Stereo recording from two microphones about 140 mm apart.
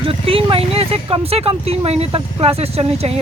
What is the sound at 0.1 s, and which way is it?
Speech, 40° right (ahead or behind).